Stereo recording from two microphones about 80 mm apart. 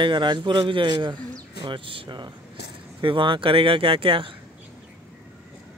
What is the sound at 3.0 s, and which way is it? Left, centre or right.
Speech, right.